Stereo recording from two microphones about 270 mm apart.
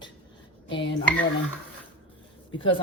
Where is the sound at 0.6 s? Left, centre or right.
Centre.